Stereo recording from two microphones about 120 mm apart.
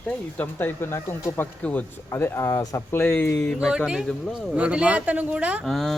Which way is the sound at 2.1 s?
20° left (ahead or behind).